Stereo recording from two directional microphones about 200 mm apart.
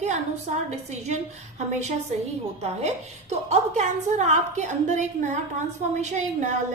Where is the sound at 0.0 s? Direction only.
35° right (ahead or behind).